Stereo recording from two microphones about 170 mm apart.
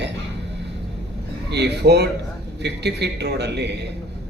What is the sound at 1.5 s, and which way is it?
A man's voice, 80° right.